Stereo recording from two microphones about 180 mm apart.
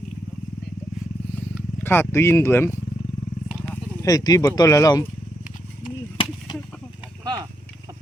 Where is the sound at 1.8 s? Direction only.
10° left (ahead or behind).